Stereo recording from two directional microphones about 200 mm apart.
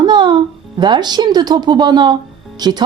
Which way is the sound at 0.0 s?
20° right (ahead or behind).